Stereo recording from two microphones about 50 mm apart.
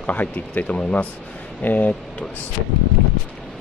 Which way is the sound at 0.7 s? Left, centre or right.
Left.